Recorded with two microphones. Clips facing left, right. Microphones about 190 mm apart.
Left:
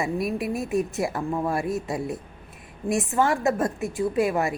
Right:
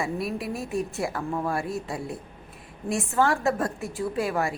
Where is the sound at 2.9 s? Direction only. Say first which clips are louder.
Left 1 dB; 15° left (ahead or behind).